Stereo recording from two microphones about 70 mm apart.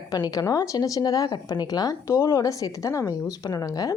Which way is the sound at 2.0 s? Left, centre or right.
Left.